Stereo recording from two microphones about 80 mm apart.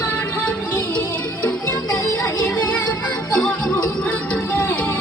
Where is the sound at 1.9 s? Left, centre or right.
Left.